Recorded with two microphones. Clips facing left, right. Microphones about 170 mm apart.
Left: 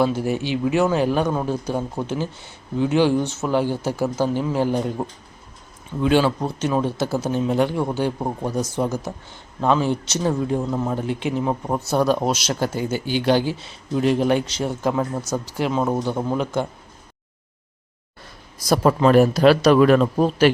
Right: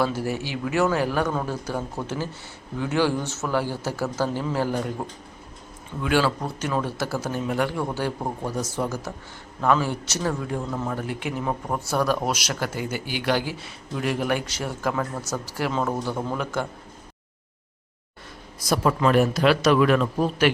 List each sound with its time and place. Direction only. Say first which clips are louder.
0.0 s a man's voice: left 4 dB; 20° left (ahead or behind)
18.6 s a man's voice: left 5 dB; 35° left (ahead or behind)